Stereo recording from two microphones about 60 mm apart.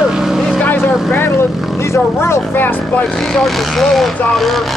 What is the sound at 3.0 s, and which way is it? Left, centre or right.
Speech, centre.